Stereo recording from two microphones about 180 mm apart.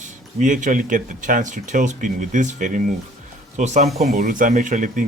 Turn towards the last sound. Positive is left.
turn(degrees=-45)  # may be behind; listen again after turning